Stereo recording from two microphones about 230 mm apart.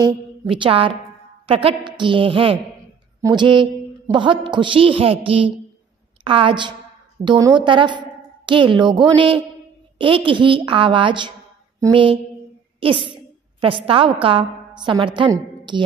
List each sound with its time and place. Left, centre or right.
0.0 s a woman's voice: right